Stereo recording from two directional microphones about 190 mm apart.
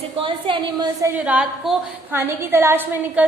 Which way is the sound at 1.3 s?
5° right (ahead or behind).